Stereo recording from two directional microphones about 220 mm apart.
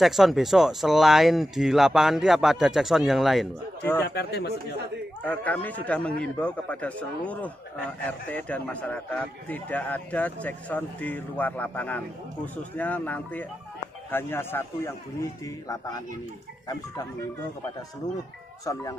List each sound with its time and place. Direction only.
0.0 s speech: centre (ahead or behind)
4.0 s speech: 50° left (ahead or behind)
5.2 s a man's voice: 5° left (ahead or behind)
18.7 s a man's voice: 15° left (ahead or behind)